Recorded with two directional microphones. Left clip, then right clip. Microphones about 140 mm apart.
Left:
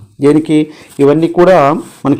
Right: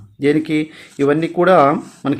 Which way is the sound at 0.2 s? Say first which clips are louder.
Left 7 dB; 40° left (ahead or behind).